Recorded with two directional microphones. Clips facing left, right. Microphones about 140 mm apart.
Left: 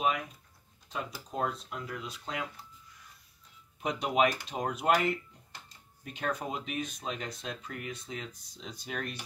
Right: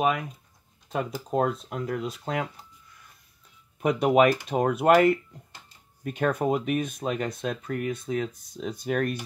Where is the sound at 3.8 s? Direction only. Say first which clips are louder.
Right 8 dB; 55° right (ahead or behind).